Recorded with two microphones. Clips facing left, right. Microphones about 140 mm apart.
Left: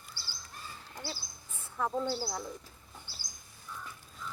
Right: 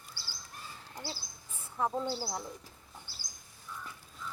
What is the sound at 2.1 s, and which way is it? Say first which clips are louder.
Speech: left 1 dB; 15° right (ahead or behind).